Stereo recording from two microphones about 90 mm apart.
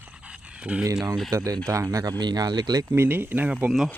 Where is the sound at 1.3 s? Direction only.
40° right (ahead or behind).